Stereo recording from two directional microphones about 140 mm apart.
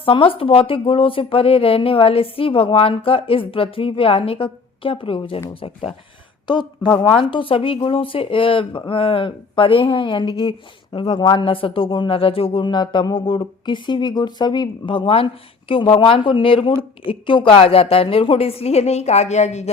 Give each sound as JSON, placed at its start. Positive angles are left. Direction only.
{"t": 0.0, "sound": "a woman's voice", "side_deg": 40}